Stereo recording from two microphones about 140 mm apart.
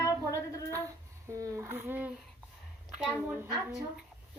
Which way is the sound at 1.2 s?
25° right (ahead or behind).